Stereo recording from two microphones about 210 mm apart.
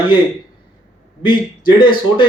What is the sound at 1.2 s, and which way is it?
Speech, 25° left (ahead or behind).